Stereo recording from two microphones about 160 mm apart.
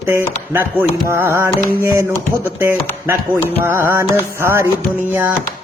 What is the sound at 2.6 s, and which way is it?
Speech, 15° right (ahead or behind).